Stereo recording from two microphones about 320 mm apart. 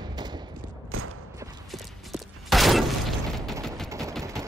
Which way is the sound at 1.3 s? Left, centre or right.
Centre.